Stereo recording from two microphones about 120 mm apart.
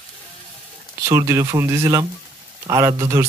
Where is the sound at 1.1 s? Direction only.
25° right (ahead or behind).